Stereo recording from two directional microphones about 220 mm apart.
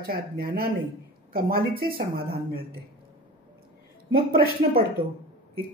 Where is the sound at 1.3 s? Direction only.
40° right (ahead or behind).